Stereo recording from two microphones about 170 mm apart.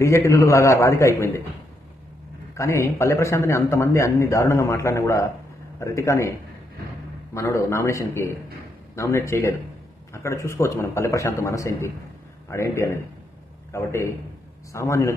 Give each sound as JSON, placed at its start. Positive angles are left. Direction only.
{"t": 0.0, "sound": "a man's voice", "side_deg": 15}
{"t": 2.5, "sound": "a man's voice", "side_deg": 15}
{"t": 7.3, "sound": "a man's voice", "side_deg": 15}